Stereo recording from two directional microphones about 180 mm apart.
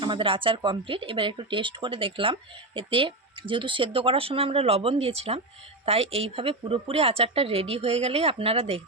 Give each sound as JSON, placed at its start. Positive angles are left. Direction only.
{"t": 0.0, "sound": "speech", "side_deg": -30}